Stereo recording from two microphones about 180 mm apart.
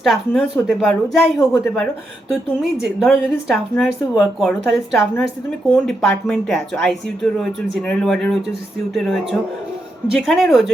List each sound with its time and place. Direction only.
0.0 s a woman's voice: centre (ahead or behind)
10.1 s a woman's voice: centre (ahead or behind)